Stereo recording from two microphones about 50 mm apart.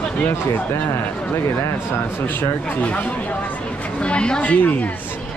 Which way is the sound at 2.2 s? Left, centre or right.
Left.